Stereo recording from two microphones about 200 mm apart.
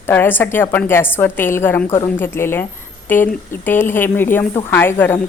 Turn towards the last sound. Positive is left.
turn(degrees=10)  # may be behind; listen again after turning